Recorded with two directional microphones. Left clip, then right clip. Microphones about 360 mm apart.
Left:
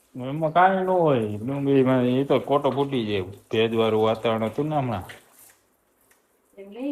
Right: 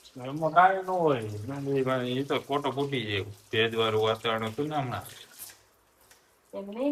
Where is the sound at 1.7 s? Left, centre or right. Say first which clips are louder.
Left 8 dB; centre.